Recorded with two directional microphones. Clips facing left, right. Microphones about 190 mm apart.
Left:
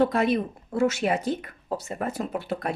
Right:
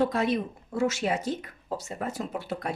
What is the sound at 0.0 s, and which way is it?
Speech, 60° left (ahead or behind).